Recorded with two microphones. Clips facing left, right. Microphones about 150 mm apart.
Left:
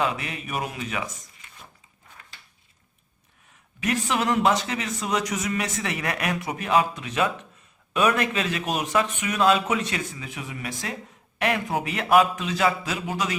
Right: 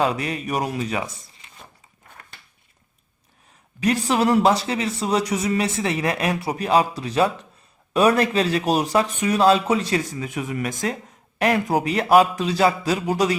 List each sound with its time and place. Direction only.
0.0 s a man's voice: 35° right (ahead or behind)
3.8 s a man's voice: 35° right (ahead or behind)